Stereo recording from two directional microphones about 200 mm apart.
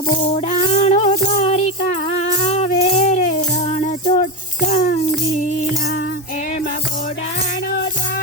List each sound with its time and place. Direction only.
0.3 s music: 35° left (ahead or behind)